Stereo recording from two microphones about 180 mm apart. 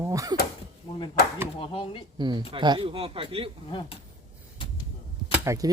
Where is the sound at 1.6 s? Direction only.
30° left (ahead or behind).